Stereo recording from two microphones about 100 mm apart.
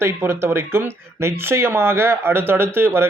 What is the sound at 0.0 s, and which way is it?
Speech, 25° right (ahead or behind).